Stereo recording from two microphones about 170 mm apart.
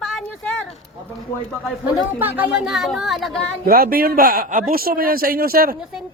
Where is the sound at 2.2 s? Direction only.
10° right (ahead or behind).